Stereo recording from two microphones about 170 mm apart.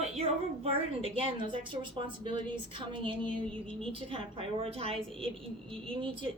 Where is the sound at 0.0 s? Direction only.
35° right (ahead or behind).